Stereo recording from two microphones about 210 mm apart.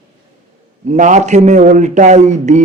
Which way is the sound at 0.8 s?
35° right (ahead or behind).